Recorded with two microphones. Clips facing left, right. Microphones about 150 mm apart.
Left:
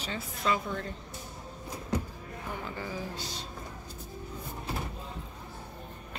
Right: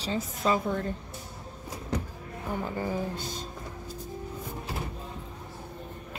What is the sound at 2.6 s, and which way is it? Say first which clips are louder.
Speech: right 7 dB; 40° right (ahead or behind).